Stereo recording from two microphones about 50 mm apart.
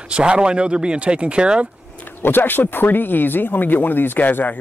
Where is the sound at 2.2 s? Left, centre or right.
Left.